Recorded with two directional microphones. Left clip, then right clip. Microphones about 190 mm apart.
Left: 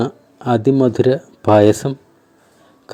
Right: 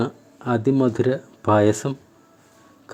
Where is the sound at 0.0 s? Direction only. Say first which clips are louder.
Left 5 dB; 20° left (ahead or behind).